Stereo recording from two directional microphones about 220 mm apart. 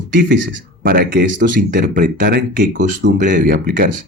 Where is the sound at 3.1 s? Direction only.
35° right (ahead or behind).